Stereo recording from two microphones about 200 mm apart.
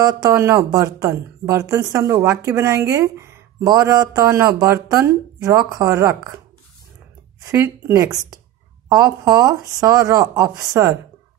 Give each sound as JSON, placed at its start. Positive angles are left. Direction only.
{"t": 0.0, "sound": "speech", "side_deg": -15}
{"t": 7.5, "sound": "speech", "side_deg": -15}